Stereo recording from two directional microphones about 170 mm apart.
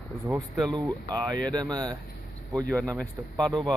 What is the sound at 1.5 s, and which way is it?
Speech, 25° right (ahead or behind).